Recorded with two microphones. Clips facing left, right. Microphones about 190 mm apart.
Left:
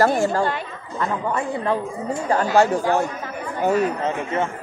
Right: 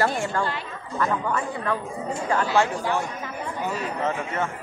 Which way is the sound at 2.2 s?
40° left (ahead or behind).